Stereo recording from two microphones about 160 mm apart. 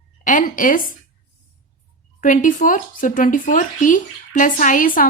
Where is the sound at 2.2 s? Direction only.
55° left (ahead or behind).